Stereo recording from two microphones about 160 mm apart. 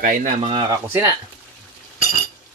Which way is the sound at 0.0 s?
55° right (ahead or behind).